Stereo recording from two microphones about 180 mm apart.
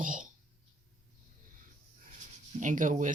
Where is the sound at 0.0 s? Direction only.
45° right (ahead or behind).